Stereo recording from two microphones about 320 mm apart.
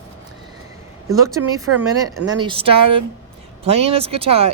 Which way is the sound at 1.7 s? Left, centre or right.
Right.